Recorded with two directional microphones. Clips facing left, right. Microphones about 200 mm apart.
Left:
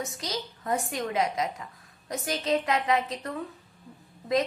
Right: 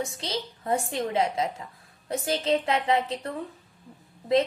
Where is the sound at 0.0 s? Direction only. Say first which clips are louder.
Right 2 dB; 30° right (ahead or behind).